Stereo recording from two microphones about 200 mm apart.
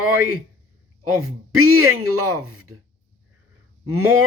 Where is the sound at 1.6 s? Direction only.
90° right.